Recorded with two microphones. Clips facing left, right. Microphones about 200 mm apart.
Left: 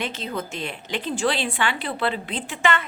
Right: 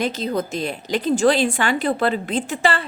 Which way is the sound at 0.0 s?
40° right (ahead or behind).